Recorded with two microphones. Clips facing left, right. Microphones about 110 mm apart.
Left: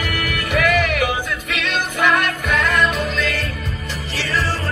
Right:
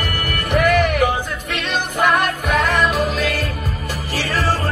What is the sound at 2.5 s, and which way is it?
Music, 35° right (ahead or behind).